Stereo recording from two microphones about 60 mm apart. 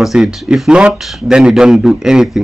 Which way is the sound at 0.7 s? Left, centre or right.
Centre.